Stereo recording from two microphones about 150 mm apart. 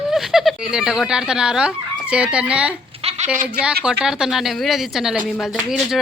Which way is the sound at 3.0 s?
45° right (ahead or behind).